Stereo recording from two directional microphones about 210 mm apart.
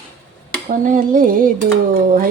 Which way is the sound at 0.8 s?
40° right (ahead or behind).